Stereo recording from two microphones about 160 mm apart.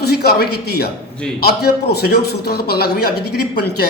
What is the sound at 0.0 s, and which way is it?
A man's voice, 90° left.